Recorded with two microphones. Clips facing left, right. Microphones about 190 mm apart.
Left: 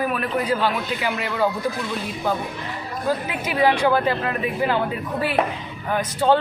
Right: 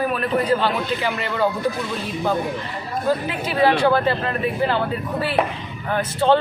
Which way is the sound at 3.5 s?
15° left (ahead or behind).